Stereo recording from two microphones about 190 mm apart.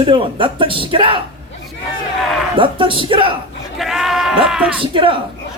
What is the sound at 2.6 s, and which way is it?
Speech, 25° right (ahead or behind).